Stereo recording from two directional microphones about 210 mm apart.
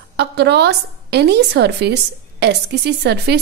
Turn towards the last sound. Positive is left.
turn(degrees=-55)  # may be behind; listen again after turning